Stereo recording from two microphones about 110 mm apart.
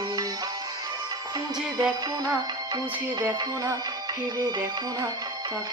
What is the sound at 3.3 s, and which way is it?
Music, 30° right (ahead or behind).